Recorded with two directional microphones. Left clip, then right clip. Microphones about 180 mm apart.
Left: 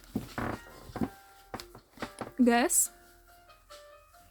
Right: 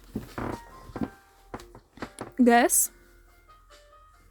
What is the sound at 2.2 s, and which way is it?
Music, 35° right (ahead or behind).